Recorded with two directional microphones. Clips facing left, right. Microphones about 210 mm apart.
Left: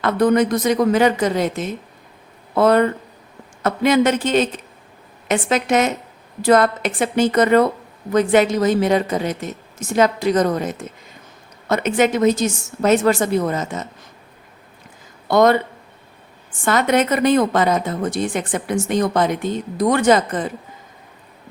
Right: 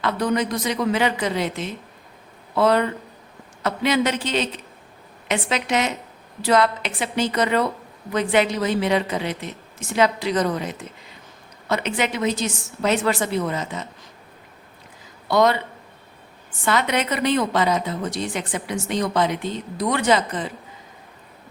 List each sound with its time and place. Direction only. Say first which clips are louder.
0.0 s a woman's voice: left 6 dB; 50° left (ahead or behind)
15.3 s a woman's voice: left 4 dB; 50° left (ahead or behind)
16.6 s a woman's voice: left 5 dB; 50° left (ahead or behind)